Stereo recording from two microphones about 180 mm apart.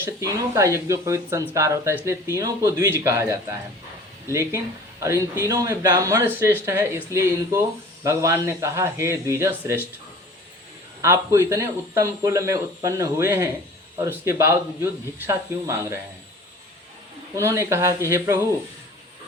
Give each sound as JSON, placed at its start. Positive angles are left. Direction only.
{"t": 0.0, "sound": "speech", "side_deg": -15}
{"t": 11.0, "sound": "speech", "side_deg": -15}
{"t": 17.3, "sound": "speech", "side_deg": -15}